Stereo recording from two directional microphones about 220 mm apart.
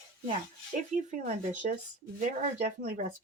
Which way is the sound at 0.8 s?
35° right (ahead or behind).